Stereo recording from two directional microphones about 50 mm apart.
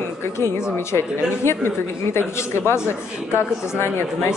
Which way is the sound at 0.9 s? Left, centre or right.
Left.